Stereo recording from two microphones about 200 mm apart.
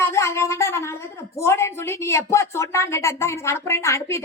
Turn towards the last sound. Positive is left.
turn(degrees=15)  # may be behind; listen again after turning